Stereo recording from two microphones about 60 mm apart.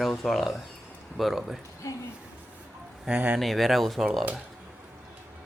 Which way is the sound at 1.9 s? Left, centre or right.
Left.